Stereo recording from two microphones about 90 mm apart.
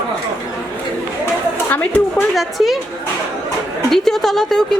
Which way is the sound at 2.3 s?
Centre (ahead or behind).